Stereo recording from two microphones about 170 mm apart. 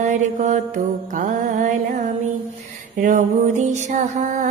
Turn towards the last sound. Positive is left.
turn(degrees=-45)  # may be behind; listen again after turning